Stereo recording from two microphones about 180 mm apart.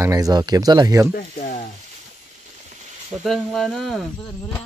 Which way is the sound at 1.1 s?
50° left (ahead or behind).